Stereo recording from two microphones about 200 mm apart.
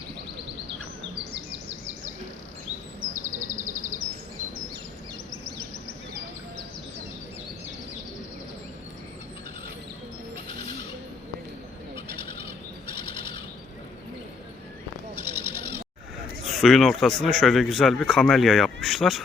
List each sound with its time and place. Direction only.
3.2 s a sound: 40° right (ahead or behind)
12.9 s bird flight: 25° left (ahead or behind)
15.2 s bird: 10° right (ahead or behind)
16.5 s speech: centre (ahead or behind)